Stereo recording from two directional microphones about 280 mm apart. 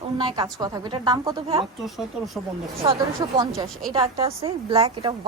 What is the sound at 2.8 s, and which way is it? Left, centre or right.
A woman's voice, centre.